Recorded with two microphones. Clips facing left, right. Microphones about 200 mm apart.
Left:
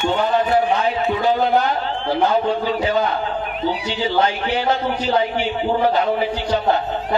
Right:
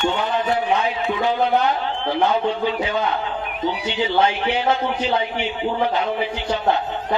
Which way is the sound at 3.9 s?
35° left (ahead or behind).